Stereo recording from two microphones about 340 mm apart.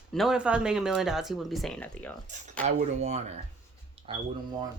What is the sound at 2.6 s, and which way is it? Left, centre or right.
Speech, centre.